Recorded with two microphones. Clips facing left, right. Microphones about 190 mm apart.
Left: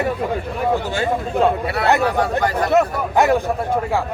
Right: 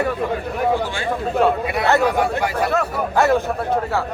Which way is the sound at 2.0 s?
10° right (ahead or behind).